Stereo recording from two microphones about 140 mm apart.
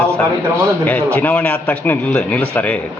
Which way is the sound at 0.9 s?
10° left (ahead or behind).